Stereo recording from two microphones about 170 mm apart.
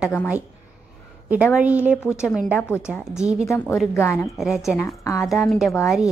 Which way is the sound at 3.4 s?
15° left (ahead or behind).